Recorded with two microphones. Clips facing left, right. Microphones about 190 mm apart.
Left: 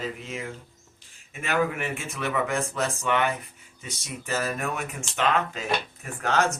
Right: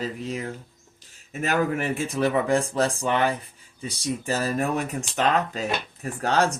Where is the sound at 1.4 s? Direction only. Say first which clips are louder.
Right 2 dB; 40° right (ahead or behind).